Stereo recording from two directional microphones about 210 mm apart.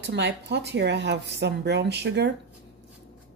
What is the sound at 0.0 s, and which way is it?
Speech, 55° right (ahead or behind).